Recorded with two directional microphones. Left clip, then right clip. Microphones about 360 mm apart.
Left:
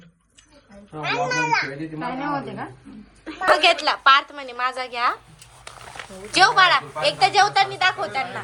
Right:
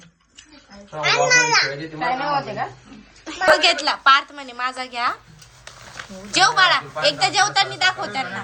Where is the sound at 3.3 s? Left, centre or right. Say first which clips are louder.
Right 1 dB; centre.